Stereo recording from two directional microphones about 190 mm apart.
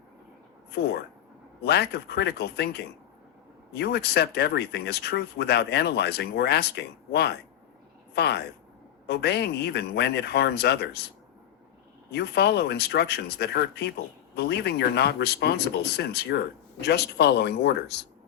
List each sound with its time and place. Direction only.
0.7 s speech: 55° left (ahead or behind)
12.1 s speech: 60° left (ahead or behind)